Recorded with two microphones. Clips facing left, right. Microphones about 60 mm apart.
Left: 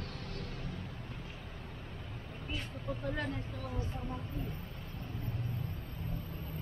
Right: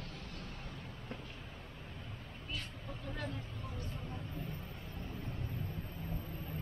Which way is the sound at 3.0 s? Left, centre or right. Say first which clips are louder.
Left 5 dB; left.